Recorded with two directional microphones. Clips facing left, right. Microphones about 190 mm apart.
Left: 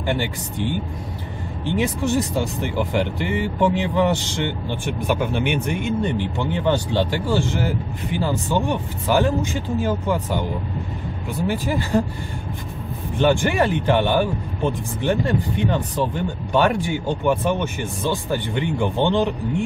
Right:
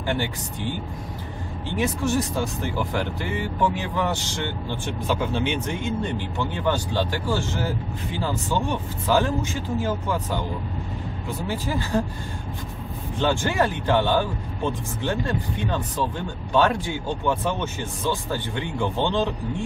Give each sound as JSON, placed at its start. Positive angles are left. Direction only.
{"t": 0.0, "sound": "speech", "side_deg": 15}
{"t": 11.4, "sound": "speech", "side_deg": 15}
{"t": 13.2, "sound": "speech", "side_deg": 15}